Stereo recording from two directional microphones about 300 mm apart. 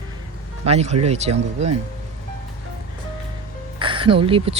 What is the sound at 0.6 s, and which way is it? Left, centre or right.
Speech, right.